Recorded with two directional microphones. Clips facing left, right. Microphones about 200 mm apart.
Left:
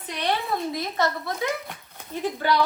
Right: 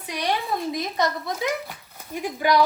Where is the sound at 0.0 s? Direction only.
10° right (ahead or behind).